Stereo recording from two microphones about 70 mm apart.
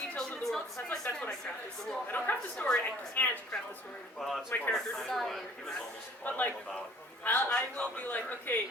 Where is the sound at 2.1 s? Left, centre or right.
Left.